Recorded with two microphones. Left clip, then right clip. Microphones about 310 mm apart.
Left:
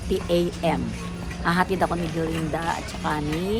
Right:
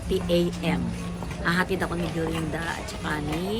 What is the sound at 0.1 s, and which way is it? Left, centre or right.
Speech, centre.